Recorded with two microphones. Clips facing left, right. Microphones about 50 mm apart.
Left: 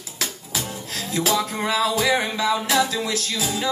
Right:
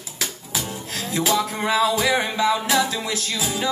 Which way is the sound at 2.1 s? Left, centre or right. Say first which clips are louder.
Right 1 dB; centre.